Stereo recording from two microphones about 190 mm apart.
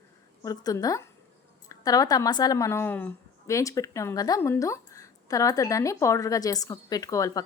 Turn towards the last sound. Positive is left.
turn(degrees=20)  # may be behind; listen again after turning